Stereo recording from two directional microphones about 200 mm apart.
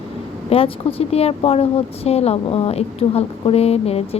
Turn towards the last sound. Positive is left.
turn(degrees=30)  # may be behind; listen again after turning